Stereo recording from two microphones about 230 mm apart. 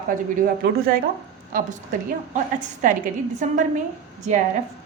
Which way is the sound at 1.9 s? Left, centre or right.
Right.